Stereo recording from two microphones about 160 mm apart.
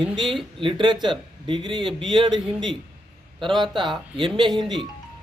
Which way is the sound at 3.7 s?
30° right (ahead or behind).